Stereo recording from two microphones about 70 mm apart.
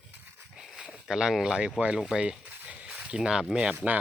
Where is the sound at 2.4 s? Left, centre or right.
Centre.